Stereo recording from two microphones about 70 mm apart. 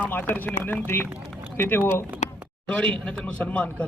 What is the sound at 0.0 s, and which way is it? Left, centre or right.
Speech, left.